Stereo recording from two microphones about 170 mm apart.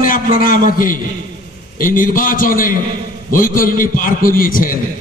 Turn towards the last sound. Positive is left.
turn(degrees=55)  # may be behind; listen again after turning